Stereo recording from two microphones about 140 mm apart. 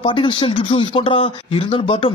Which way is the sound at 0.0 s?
35° left (ahead or behind).